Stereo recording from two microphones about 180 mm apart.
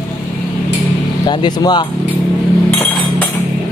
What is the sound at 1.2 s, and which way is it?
Speech, 25° left (ahead or behind).